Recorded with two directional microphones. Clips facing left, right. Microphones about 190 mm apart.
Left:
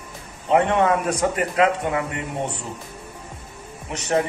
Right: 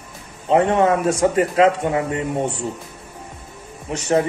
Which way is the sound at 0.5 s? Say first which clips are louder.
Right 2 dB; 30° right (ahead or behind).